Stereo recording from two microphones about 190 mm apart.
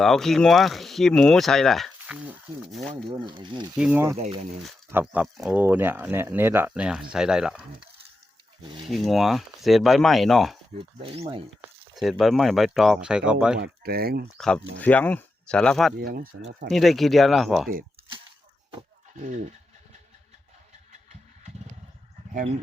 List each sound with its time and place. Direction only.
0.0 s speech: centre (ahead or behind)
3.2 s speech: 25° right (ahead or behind)
3.8 s speech: 10° right (ahead or behind)
4.2 s speech: 35° right (ahead or behind)
4.9 s speech: 10° right (ahead or behind)
8.9 s speech: centre (ahead or behind)
11.0 s speech: 30° right (ahead or behind)
11.9 s speech: centre (ahead or behind)
13.6 s speech: 55° right (ahead or behind)
14.3 s speech: 5° left (ahead or behind)
16.0 s speech: 50° right (ahead or behind)
16.6 s speech: centre (ahead or behind)
22.3 s speech: 45° right (ahead or behind)